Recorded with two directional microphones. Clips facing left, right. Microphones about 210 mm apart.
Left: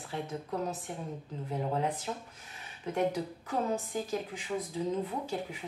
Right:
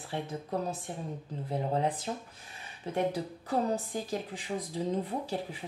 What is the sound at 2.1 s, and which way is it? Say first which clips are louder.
A woman's voice: right 1 dB; 35° right (ahead or behind).